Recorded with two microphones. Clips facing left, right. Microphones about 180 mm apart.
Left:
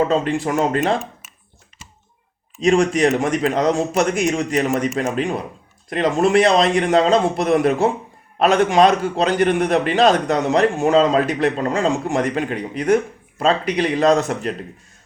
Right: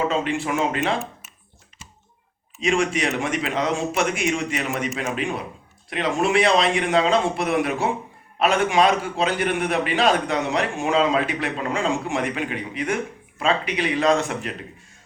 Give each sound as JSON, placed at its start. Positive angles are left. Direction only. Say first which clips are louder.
{"t": 0.1, "sound": "a man's voice", "louder": "left 4 dB", "side_deg": 40}
{"t": 2.6, "sound": "a man's voice", "louder": "left 6 dB", "side_deg": 40}